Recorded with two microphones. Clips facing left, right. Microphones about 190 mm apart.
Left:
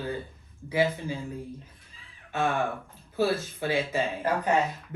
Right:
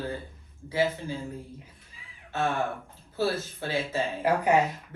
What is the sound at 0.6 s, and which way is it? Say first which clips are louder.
Speech: left 1 dB; 15° left (ahead or behind).